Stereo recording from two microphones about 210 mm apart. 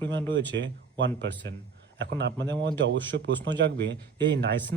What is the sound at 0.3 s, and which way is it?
A man's voice, 60° right (ahead or behind).